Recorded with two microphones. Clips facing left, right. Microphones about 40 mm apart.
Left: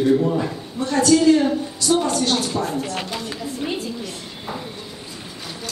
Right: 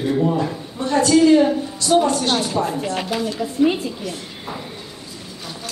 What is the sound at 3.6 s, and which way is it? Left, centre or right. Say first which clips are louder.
Speech: right 11 dB; centre.